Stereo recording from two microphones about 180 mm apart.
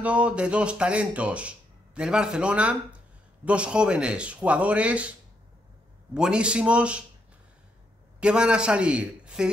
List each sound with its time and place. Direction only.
0.0 s a man's voice: 5° right (ahead or behind)
6.1 s speech: 5° right (ahead or behind)
8.2 s a man's voice: 5° right (ahead or behind)